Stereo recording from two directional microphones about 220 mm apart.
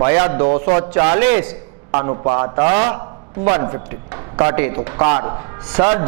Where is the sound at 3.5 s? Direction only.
15° right (ahead or behind).